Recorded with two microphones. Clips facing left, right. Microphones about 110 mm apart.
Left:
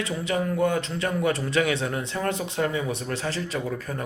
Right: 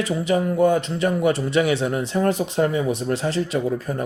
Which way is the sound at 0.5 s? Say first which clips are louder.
Right 6 dB; 30° right (ahead or behind).